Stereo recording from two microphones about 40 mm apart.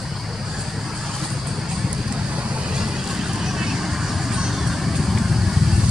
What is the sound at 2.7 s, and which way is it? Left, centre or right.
Vehicle, centre.